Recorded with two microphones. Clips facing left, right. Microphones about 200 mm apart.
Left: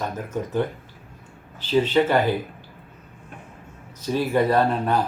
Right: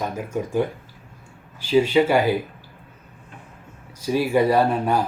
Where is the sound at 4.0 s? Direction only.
10° right (ahead or behind).